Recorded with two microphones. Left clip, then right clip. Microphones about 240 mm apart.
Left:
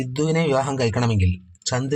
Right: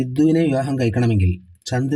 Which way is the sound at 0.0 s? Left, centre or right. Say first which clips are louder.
Right 5 dB; centre.